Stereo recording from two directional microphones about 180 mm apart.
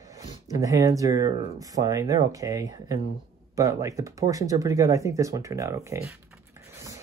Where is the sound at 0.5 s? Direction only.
20° right (ahead or behind).